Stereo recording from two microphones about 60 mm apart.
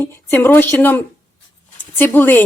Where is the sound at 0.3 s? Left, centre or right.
Left.